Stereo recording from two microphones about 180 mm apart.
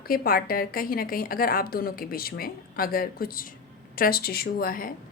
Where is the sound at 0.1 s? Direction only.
55° left (ahead or behind).